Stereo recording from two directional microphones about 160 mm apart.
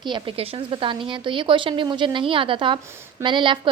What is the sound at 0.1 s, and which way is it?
A woman's voice, 35° right (ahead or behind).